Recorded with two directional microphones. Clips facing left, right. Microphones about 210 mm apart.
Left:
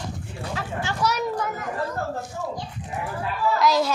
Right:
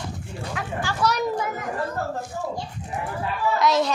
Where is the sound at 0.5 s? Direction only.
25° left (ahead or behind).